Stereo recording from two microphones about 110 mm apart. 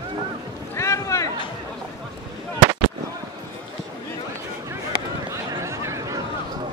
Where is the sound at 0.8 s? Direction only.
25° left (ahead or behind).